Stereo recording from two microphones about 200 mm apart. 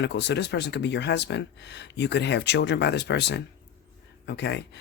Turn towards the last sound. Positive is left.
turn(degrees=60)  # may be behind; listen again after turning